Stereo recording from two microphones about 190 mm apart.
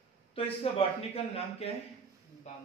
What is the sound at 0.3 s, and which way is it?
Speech, 30° left (ahead or behind).